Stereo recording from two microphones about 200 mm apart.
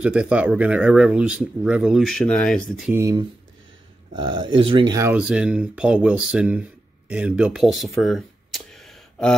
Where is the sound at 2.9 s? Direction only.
15° right (ahead or behind); by 9.4 s centre (ahead or behind).